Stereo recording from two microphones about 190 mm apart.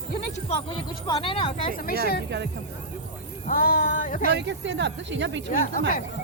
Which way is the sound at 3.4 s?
45° left (ahead or behind).